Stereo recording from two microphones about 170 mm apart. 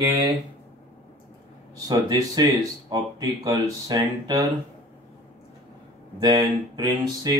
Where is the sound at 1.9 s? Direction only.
20° right (ahead or behind).